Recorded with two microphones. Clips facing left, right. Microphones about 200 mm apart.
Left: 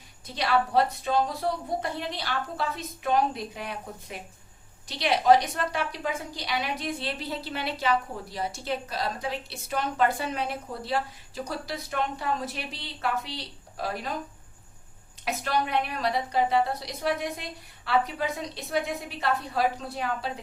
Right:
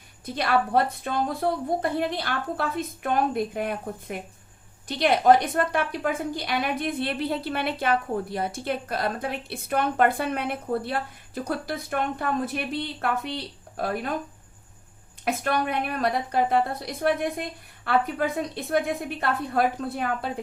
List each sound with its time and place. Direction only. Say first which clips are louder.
0.3 s a woman's voice: right 1 dB; 55° right (ahead or behind)
15.2 s a woman's voice: right 3 dB; 55° right (ahead or behind)